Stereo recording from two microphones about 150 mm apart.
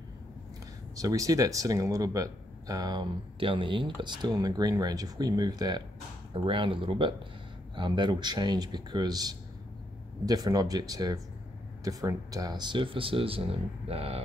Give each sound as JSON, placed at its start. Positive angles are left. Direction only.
{"t": 0.9, "sound": "speech", "side_deg": -20}